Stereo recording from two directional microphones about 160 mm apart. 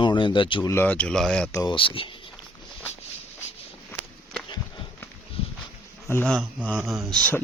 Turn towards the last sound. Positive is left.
turn(degrees=5)  # may be behind; listen again after turning